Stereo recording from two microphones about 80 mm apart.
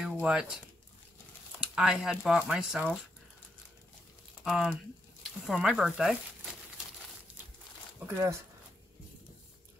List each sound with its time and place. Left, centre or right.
0.0 s speech: centre
1.6 s speech: centre
4.5 s speech: centre
7.3 s a sound: centre